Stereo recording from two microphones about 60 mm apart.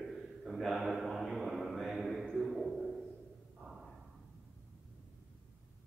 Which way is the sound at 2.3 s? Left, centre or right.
Centre.